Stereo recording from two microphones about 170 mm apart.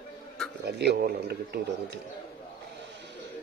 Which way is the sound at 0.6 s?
80° right.